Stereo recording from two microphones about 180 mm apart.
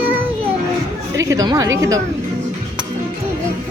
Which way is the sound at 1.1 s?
15° right (ahead or behind).